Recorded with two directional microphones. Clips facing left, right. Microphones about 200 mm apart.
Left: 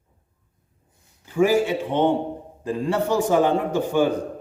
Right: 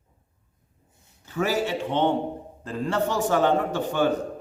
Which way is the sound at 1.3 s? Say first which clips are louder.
Left 6 dB; 10° left (ahead or behind).